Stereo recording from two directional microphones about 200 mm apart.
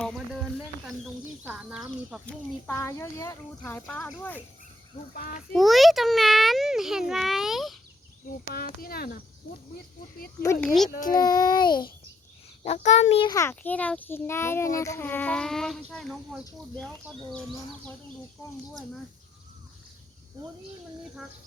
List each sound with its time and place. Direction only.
1.5 s a child's voice: 5° right (ahead or behind)
2.2 s a child's voice: 10° left (ahead or behind)
5.1 s speech: 45° left (ahead or behind)
5.5 s a child's voice: centre (ahead or behind)
8.5 s speech: 45° left (ahead or behind)
10.4 s a child's voice: 15° left (ahead or behind)
10.8 s speech: 45° left (ahead or behind)
11.2 s a child's voice: 20° left (ahead or behind)
12.6 s a child's voice: 35° left (ahead or behind)
13.3 s a child's voice: 10° left (ahead or behind)
20.4 s speech: 20° right (ahead or behind)